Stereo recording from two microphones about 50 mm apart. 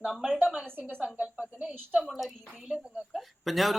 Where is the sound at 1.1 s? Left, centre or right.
Right.